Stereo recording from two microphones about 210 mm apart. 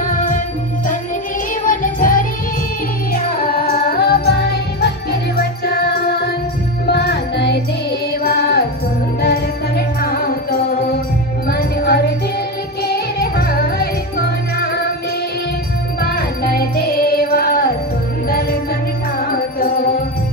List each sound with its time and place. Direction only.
0.0 s music: 40° left (ahead or behind)
1.7 s music: 40° left (ahead or behind)
16.0 s music: 45° left (ahead or behind)